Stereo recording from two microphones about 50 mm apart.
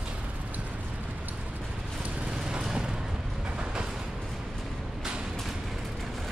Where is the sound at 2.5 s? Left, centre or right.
Centre.